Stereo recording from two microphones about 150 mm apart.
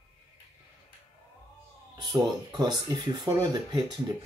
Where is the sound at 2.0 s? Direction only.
30° right (ahead or behind).